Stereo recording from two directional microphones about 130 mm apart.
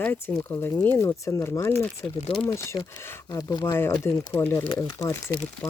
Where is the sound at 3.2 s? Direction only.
30° left (ahead or behind).